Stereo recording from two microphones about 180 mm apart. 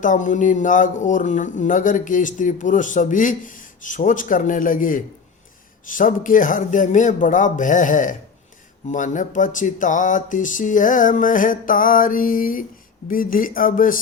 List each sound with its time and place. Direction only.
0.0 s speech: 45° left (ahead or behind)